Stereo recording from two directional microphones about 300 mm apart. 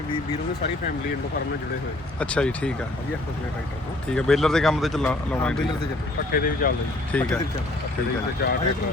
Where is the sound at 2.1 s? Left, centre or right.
Centre.